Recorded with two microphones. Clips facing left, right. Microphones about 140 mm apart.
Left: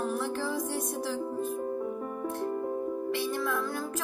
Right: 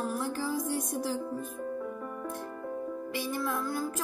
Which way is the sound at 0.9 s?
15° right (ahead or behind).